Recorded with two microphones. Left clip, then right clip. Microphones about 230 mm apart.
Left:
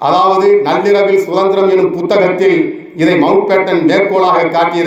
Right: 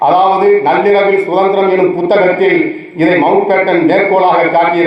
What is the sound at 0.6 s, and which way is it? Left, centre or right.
Speech, left.